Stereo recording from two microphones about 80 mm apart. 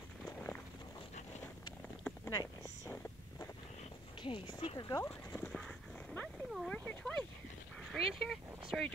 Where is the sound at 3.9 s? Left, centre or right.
Left.